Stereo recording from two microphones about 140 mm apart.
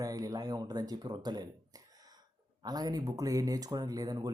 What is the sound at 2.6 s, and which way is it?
Speech, 30° right (ahead or behind).